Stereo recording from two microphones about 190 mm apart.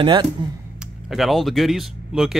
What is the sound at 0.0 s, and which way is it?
Speech, 25° right (ahead or behind).